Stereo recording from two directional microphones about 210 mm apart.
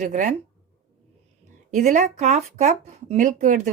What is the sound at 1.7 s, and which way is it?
Speech, 35° right (ahead or behind).